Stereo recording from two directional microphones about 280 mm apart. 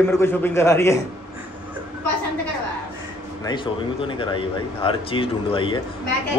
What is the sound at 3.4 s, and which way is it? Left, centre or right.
A man's voice, centre.